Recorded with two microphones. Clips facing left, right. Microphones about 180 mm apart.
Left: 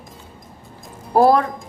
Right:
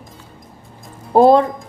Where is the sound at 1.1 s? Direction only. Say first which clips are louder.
Right 4 dB; 25° right (ahead or behind).